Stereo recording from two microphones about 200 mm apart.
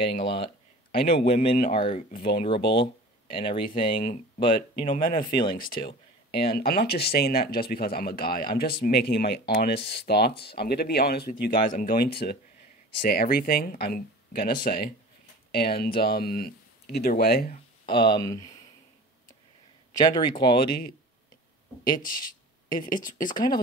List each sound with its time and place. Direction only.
0.0 s speech: 25° left (ahead or behind)
4.8 s speech: 45° left (ahead or behind)
17.9 s speech: 20° left (ahead or behind)
20.0 s speech: 20° left (ahead or behind)
22.0 s speech: 45° left (ahead or behind)